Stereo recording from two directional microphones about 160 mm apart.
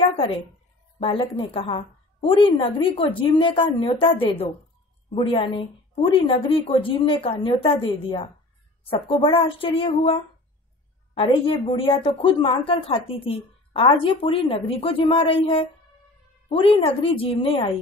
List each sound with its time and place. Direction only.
0.1 s a sound: 35° left (ahead or behind)
0.9 s a woman's voice: 30° left (ahead or behind)
11.1 s a woman's voice: 35° left (ahead or behind)